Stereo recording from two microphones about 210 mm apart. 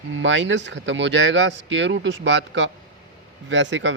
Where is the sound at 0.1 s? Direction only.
65° right (ahead or behind).